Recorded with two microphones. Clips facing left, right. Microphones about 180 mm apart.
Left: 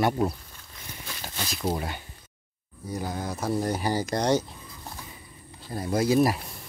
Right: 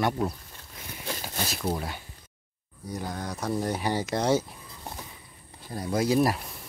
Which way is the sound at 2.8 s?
5° left (ahead or behind).